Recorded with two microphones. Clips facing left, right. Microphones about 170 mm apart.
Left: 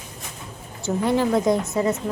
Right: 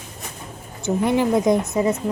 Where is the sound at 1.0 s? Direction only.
15° right (ahead or behind).